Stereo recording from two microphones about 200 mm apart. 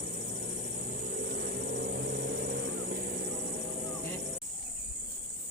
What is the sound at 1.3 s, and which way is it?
Vehicle, 50° right (ahead or behind).